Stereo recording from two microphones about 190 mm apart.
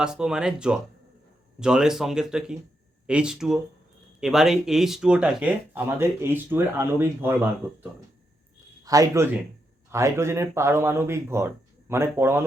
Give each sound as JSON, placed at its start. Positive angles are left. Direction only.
{"t": 0.0, "sound": "speech", "side_deg": -5}
{"t": 8.8, "sound": "speech", "side_deg": -20}